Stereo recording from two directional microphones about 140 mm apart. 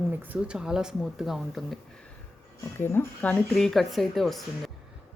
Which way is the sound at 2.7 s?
15° left (ahead or behind).